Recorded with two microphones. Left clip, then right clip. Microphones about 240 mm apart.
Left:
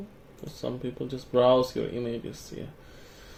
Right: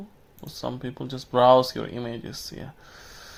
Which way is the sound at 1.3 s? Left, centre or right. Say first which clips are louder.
Right 4 dB; right.